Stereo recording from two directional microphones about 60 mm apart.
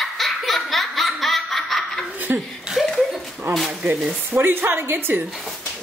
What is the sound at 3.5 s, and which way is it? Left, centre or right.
A woman's voice, right.